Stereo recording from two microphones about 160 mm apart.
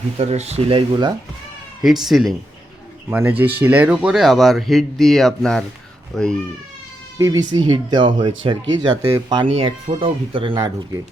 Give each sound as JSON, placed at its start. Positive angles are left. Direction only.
{"t": 0.2, "sound": "speech", "side_deg": -40}
{"t": 1.8, "sound": "speech", "side_deg": 0}
{"t": 3.1, "sound": "speech", "side_deg": -10}
{"t": 7.2, "sound": "speech", "side_deg": -20}
{"t": 9.5, "sound": "speech", "side_deg": -40}